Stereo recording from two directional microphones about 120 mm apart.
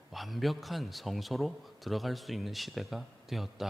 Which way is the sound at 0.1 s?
Centre (ahead or behind).